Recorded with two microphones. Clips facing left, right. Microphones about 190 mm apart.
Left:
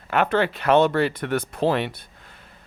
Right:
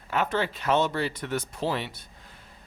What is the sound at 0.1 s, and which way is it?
Speech, 65° left (ahead or behind).